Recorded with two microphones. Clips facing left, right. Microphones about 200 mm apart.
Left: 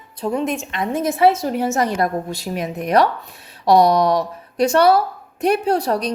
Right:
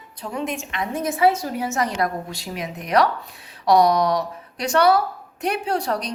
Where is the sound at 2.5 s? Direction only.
55° left (ahead or behind).